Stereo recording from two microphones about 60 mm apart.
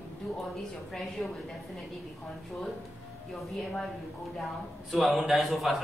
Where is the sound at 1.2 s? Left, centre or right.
Centre.